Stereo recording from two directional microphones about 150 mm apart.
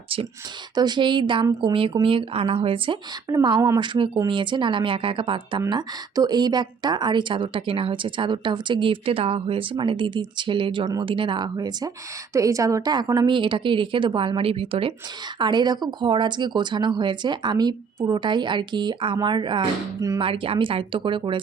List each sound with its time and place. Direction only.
0.8 s a woman's voice: 30° right (ahead or behind)